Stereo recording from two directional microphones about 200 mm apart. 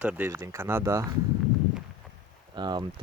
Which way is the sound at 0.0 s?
10° right (ahead or behind).